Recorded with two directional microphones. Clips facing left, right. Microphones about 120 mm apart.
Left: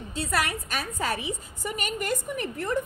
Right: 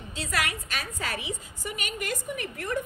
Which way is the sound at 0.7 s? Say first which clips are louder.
Left 4 dB; 45° left (ahead or behind).